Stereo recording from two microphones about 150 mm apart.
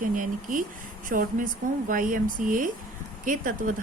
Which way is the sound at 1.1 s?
90° right.